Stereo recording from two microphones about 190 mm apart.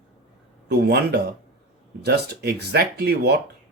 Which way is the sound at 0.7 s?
55° right (ahead or behind).